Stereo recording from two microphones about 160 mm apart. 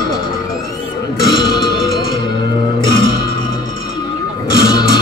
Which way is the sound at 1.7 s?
70° left (ahead or behind).